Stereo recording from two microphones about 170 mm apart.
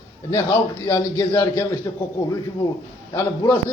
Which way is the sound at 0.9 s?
20° left (ahead or behind).